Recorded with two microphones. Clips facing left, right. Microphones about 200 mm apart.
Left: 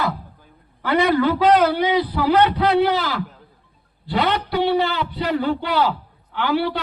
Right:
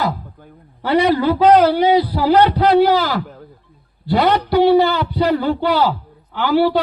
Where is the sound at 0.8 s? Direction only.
30° right (ahead or behind).